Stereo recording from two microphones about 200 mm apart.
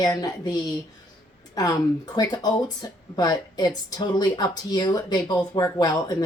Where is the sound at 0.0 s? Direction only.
20° left (ahead or behind).